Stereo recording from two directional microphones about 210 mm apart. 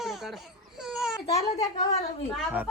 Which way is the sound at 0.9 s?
Centre (ahead or behind).